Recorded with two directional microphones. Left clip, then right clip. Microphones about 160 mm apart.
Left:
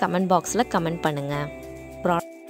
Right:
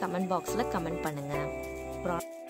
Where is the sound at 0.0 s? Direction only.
55° left (ahead or behind).